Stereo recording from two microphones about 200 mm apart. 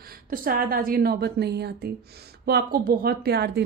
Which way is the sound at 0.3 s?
45° right (ahead or behind).